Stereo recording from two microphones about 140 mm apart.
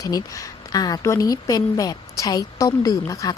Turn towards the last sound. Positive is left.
turn(degrees=25)  # may be behind; listen again after turning